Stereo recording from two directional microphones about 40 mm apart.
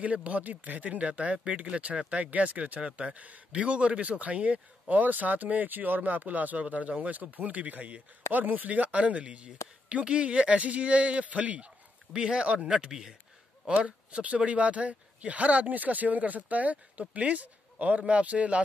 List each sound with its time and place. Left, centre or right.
0.0 s a man's voice: right
12.1 s speech: right
13.7 s a man's voice: right